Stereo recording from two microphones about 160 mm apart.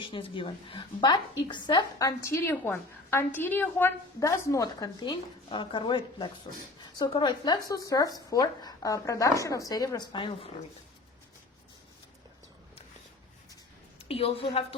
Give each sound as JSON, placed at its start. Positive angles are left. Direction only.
{"t": 0.0, "sound": "a woman's voice", "side_deg": 30}
{"t": 14.1, "sound": "a woman's voice", "side_deg": 35}